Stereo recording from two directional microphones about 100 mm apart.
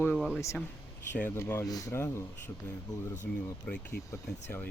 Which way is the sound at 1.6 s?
35° left (ahead or behind).